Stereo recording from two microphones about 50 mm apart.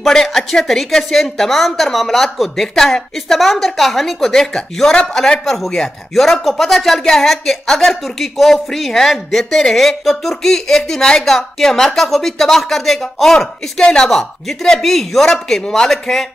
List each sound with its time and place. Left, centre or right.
0.0 s a woman's voice: centre